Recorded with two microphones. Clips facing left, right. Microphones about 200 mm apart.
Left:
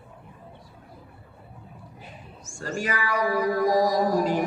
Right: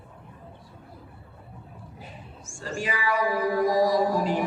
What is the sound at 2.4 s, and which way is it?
Speech, 40° left (ahead or behind).